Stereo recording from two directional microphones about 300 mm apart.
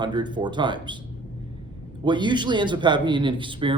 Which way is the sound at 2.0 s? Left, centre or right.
Centre.